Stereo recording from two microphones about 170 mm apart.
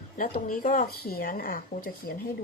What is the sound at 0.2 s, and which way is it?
Speech, 55° left (ahead or behind).